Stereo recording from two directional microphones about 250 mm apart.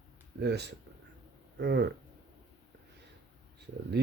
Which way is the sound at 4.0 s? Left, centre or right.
Right.